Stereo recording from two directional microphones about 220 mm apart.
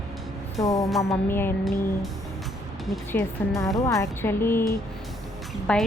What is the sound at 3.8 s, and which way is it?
Speech, 15° left (ahead or behind).